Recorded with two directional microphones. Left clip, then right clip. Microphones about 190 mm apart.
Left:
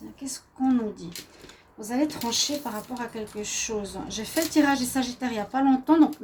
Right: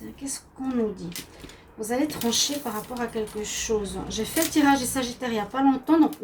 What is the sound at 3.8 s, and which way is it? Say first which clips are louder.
Speech: right 3 dB; 45° left (ahead or behind).